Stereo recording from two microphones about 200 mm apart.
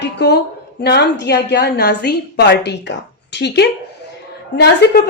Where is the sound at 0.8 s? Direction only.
55° left (ahead or behind).